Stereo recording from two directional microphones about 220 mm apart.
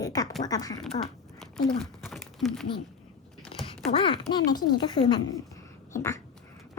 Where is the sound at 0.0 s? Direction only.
15° left (ahead or behind).